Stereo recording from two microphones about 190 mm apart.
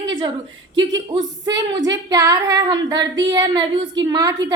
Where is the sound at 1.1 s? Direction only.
20° right (ahead or behind).